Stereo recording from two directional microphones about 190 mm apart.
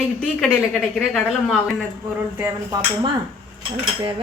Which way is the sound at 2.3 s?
10° right (ahead or behind).